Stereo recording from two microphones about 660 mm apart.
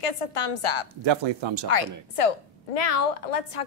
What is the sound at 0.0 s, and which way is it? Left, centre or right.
Speech, left.